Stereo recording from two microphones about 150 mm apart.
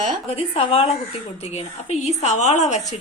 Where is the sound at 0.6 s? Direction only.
40° left (ahead or behind).